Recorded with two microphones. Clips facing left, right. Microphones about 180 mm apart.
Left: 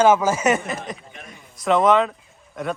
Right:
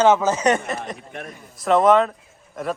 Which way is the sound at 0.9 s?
65° right (ahead or behind).